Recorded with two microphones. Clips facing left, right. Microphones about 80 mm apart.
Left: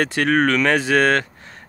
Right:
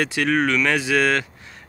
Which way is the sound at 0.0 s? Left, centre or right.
Left.